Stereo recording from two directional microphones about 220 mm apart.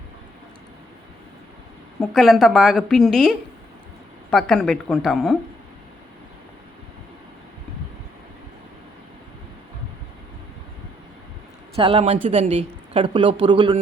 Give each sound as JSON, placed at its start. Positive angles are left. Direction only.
{"t": 2.0, "sound": "a woman's voice", "side_deg": 0}
{"t": 11.8, "sound": "a woman's voice", "side_deg": -25}